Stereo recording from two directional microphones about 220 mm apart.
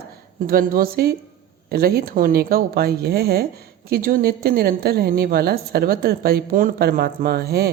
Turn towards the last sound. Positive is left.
turn(degrees=-45)  # may be behind; listen again after turning